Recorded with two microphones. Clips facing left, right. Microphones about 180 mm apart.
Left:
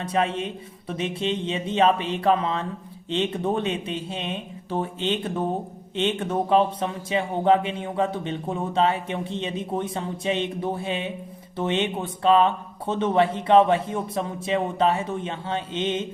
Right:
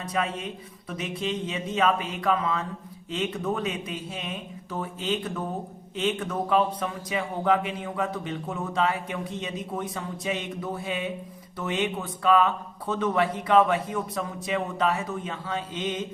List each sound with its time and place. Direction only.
0.1 s speech: 25° left (ahead or behind)